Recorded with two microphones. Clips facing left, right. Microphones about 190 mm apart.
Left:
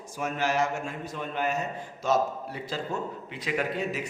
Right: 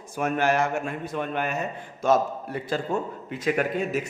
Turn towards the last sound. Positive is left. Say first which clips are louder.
# right 4 dB
turn(degrees=-50)  # may be behind; listen again after turning